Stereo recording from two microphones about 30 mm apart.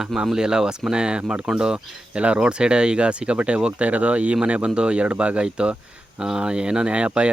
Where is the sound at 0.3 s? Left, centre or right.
Right.